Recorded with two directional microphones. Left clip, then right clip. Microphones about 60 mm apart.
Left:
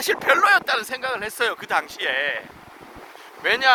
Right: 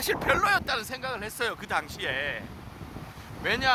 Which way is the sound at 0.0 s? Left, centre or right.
Left.